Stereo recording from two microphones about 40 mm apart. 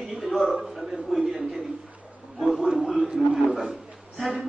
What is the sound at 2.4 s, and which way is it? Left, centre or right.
A man's voice, centre.